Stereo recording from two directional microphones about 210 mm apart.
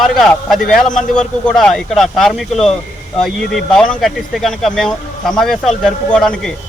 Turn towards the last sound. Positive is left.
turn(degrees=5)  # may be behind; listen again after turning